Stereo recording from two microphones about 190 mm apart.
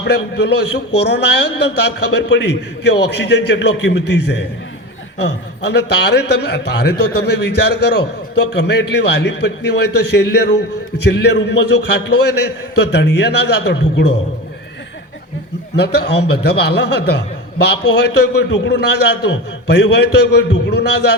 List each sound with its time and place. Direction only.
0.1 s a man's voice: 60° left (ahead or behind)
15.7 s a man's voice: 60° left (ahead or behind)